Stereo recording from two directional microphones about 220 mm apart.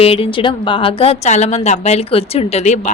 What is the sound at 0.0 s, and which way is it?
A woman's voice, 25° left (ahead or behind).